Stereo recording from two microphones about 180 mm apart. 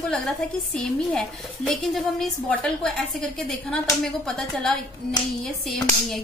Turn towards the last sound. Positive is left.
turn(degrees=5)  # may be behind; listen again after turning